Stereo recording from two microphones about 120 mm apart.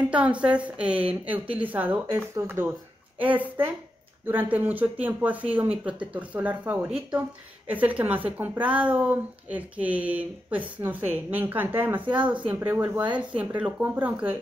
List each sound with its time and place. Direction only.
0.1 s speech: 10° right (ahead or behind)